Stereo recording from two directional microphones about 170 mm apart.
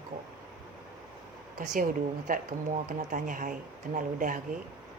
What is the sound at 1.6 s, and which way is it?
Speech, 50° right (ahead or behind).